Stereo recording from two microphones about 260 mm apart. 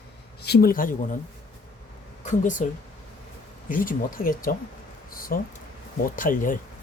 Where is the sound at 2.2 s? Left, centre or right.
Left.